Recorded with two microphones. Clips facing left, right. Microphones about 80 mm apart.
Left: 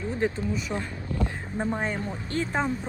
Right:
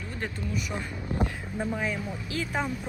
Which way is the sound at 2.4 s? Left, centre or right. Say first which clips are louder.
Left 3 dB; left.